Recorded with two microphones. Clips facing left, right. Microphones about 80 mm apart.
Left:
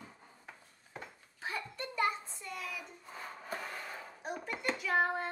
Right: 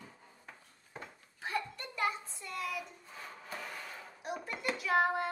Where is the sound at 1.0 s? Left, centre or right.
Centre.